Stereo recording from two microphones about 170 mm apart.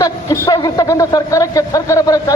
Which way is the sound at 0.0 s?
20° left (ahead or behind).